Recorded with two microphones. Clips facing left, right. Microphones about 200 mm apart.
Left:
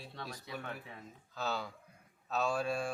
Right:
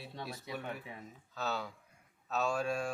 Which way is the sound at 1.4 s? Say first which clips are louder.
Even; centre (ahead or behind).